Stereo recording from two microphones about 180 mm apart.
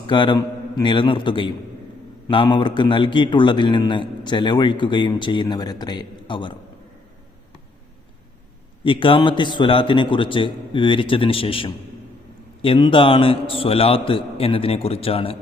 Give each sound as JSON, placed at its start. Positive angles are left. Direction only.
{"t": 0.0, "sound": "a man's voice", "side_deg": 25}
{"t": 8.8, "sound": "a man's voice", "side_deg": 30}